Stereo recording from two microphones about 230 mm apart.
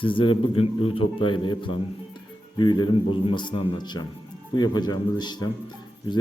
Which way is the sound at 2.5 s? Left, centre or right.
Centre.